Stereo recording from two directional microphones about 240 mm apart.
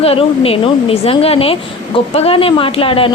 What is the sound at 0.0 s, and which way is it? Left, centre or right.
A woman's voice, left.